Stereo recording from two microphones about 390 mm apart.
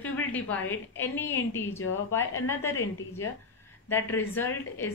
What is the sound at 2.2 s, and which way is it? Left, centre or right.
Speech, left.